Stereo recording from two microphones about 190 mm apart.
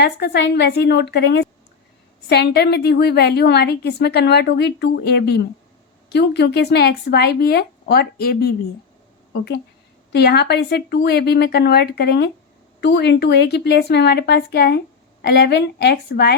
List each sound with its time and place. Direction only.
0.0 s a woman's voice: 60° left (ahead or behind)
10.1 s a woman's voice: 60° left (ahead or behind)